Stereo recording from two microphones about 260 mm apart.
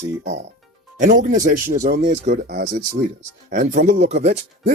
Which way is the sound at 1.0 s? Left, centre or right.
Right.